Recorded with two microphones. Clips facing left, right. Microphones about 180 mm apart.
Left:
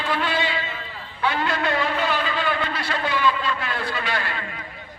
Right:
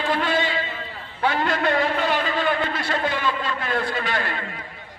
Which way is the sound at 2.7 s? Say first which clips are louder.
Right 1 dB; 50° right (ahead or behind).